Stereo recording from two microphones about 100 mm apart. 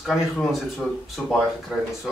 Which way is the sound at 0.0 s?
Centre (ahead or behind).